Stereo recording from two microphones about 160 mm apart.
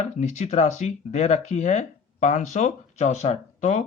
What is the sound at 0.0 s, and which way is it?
Speech, 45° left (ahead or behind).